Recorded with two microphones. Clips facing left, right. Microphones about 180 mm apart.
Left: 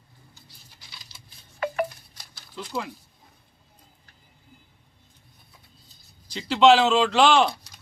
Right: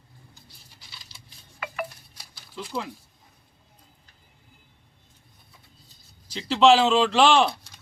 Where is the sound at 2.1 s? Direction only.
5° right (ahead or behind).